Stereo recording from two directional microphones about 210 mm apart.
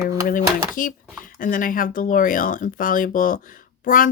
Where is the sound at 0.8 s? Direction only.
40° left (ahead or behind).